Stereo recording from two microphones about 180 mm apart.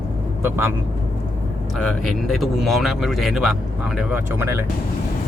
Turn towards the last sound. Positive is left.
turn(degrees=0)  # may be behind; listen again after turning